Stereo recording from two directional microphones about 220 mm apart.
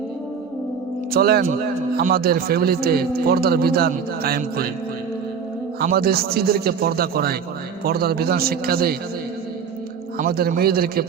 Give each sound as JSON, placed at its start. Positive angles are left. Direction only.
{"t": 1.1, "sound": "a man's voice", "side_deg": -45}
{"t": 5.8, "sound": "a man's voice", "side_deg": -45}
{"t": 10.2, "sound": "a man's voice", "side_deg": -45}